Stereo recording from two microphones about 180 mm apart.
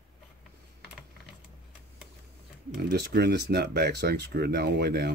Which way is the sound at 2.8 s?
60° right (ahead or behind).